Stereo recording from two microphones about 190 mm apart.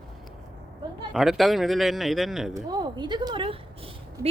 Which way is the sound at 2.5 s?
20° right (ahead or behind).